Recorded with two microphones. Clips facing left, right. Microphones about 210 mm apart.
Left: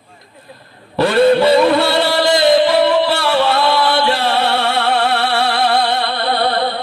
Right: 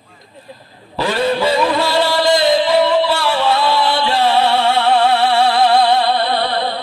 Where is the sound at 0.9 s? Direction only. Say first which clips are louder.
Left 6 dB; 60° left (ahead or behind).